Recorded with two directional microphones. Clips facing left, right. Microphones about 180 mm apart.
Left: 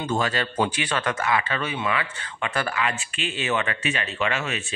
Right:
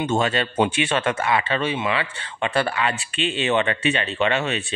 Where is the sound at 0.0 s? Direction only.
25° right (ahead or behind).